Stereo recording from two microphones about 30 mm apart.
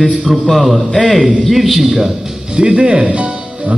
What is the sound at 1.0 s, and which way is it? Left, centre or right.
Speech, centre.